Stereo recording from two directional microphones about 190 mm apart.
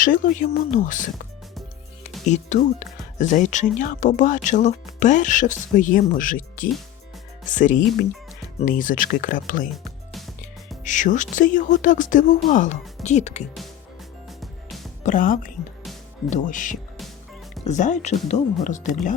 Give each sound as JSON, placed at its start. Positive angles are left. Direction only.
{"t": 0.0, "sound": "speech", "side_deg": 45}
{"t": 2.2, "sound": "speech", "side_deg": 40}
{"t": 9.7, "sound": "music", "side_deg": 0}
{"t": 10.8, "sound": "speech", "side_deg": 40}
{"t": 15.0, "sound": "speech", "side_deg": 45}